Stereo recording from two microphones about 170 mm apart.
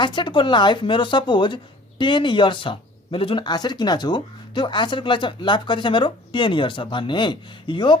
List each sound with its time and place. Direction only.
0.0 s speech: 30° left (ahead or behind)